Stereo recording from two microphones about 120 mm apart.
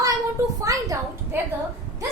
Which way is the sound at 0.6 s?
25° right (ahead or behind).